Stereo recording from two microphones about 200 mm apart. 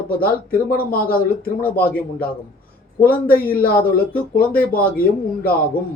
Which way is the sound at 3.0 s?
45° left (ahead or behind).